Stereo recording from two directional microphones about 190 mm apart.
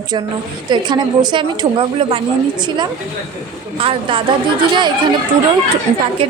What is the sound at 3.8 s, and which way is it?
Speech, 30° right (ahead or behind).